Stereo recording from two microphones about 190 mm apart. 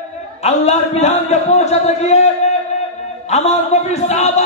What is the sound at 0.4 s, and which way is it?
A man's voice, 35° left (ahead or behind).